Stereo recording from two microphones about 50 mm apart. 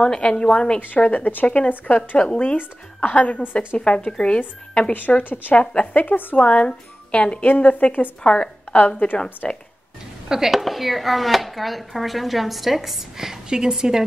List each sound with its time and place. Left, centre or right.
0.0 s a woman's voice: centre
1.0 s speech: left
2.1 s a woman's voice: centre
3.0 s speech: left
4.9 s speech: left
9.4 s a woman's voice: centre
10.2 s speech: centre